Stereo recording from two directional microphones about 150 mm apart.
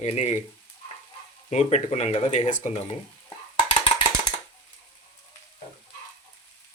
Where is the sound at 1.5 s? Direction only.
45° left (ahead or behind).